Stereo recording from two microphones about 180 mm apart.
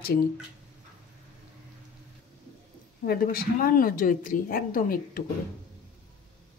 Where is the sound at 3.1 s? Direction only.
55° left (ahead or behind).